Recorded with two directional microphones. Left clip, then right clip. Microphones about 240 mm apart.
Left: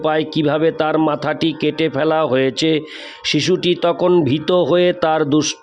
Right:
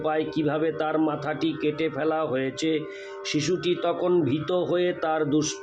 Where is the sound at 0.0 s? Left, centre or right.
Left.